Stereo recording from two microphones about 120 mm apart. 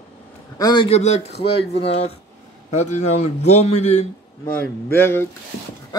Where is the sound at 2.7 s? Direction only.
75° left (ahead or behind).